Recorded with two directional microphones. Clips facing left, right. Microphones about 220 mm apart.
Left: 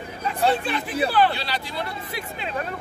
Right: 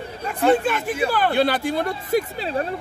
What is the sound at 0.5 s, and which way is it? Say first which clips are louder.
Speech: right 8 dB; 45° right (ahead or behind).